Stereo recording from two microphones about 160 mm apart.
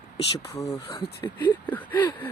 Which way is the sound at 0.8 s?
35° left (ahead or behind).